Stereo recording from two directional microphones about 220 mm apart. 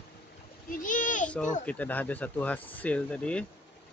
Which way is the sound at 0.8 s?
35° left (ahead or behind).